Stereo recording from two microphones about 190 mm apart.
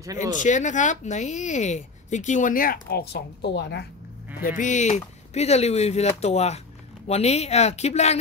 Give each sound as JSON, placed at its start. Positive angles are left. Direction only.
{"t": 0.0, "sound": "speech", "side_deg": -20}
{"t": 0.4, "sound": "speech", "side_deg": 40}
{"t": 4.4, "sound": "speech", "side_deg": 45}